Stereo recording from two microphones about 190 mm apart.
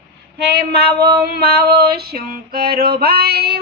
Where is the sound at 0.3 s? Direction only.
60° right (ahead or behind).